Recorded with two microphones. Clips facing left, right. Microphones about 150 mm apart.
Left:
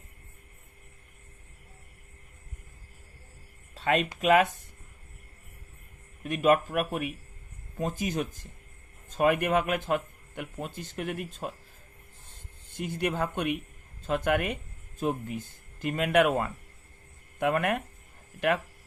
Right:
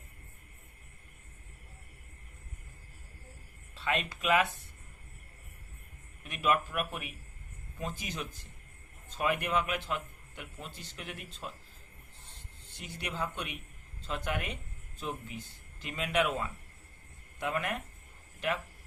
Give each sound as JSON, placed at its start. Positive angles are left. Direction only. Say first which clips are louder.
{"t": 3.8, "sound": "a sound", "louder": "left 7 dB", "side_deg": 45}
{"t": 4.2, "sound": "a man's voice", "louder": "left 6 dB", "side_deg": 45}
{"t": 6.2, "sound": "a man's voice", "louder": "left 7 dB", "side_deg": 45}
{"t": 12.7, "sound": "speech", "louder": "left 10 dB", "side_deg": 55}